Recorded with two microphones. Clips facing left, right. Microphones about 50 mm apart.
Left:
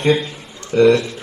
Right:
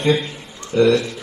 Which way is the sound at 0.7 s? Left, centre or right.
Left.